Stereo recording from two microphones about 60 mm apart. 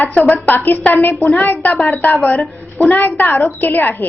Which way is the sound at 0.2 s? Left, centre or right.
Left.